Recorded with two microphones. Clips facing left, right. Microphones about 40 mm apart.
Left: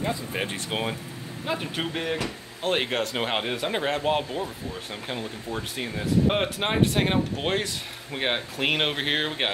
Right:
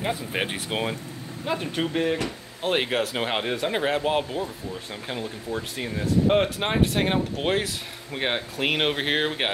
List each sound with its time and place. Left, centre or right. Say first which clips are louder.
0.3 s speech: right 2 dB; right
0.7 s speech: right 1 dB; centre